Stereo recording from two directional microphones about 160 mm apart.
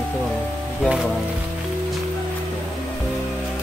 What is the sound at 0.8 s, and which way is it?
Speech, 5° right (ahead or behind).